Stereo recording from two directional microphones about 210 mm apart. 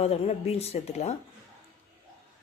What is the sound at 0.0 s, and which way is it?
Speech, 30° left (ahead or behind).